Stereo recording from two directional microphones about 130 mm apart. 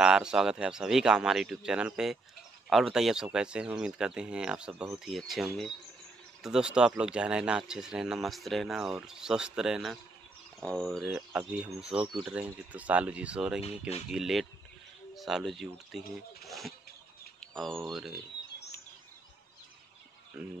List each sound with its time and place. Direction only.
0.0 s speech: 5° right (ahead or behind)
13.6 s speech: 50° left (ahead or behind)
14.0 s speech: centre (ahead or behind)
20.4 s speech: 5° right (ahead or behind)